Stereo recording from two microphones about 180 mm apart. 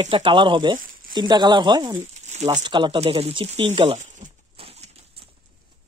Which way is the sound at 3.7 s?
35° right (ahead or behind).